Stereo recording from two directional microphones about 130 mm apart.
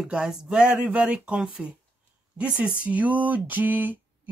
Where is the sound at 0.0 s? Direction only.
5° right (ahead or behind).